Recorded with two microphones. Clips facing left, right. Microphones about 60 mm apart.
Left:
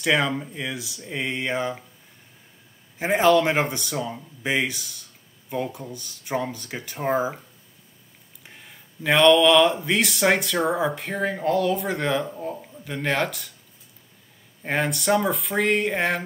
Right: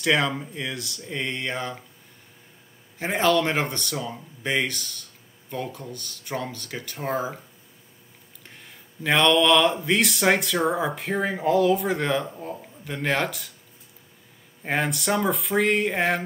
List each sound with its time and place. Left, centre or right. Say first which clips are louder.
0.0 s speech: left 1 dB; centre
3.1 s speech: left 3 dB; centre
8.5 s speech: left 1 dB; centre
14.6 s speech: left 1 dB; centre